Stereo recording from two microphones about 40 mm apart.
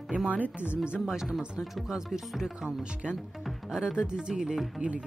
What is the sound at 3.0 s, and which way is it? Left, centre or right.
Speech, centre.